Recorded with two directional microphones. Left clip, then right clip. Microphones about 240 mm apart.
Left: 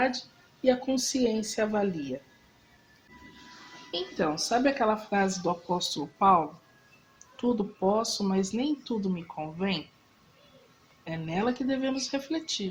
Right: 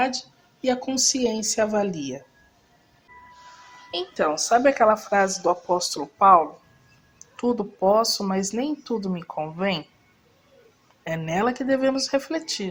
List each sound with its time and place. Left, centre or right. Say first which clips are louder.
0.6 s speech: right 3 dB; right
3.9 s speech: right 6 dB; right
11.0 s speech: right 7 dB; right